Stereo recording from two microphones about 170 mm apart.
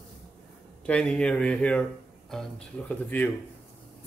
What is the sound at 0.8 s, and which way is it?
Speech, 5° left (ahead or behind).